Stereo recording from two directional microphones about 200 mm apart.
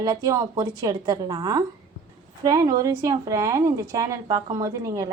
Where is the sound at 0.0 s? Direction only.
15° right (ahead or behind).